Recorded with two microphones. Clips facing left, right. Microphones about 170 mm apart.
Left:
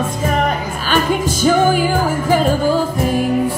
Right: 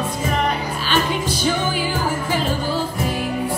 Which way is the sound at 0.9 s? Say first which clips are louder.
Left 5 dB; 45° left (ahead or behind).